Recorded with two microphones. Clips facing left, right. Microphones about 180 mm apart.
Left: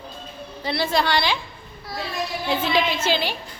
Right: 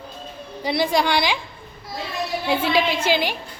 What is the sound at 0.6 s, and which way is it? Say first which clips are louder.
Speech: right 2 dB; 15° right (ahead or behind).